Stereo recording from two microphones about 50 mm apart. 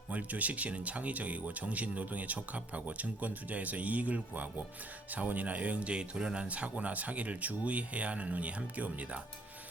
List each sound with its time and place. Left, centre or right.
0.1 s speech: right